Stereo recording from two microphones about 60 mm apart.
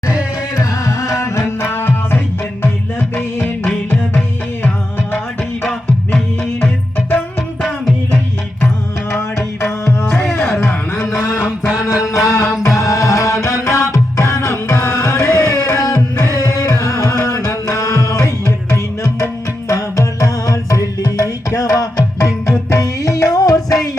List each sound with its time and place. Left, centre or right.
0.5 s music: left
5.6 s music: centre
10.1 s music: centre
12.0 s music: centre
12.6 s music: left